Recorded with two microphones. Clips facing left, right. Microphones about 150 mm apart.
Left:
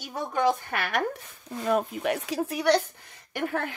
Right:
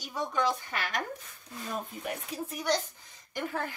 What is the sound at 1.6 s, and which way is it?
Speech, 85° left.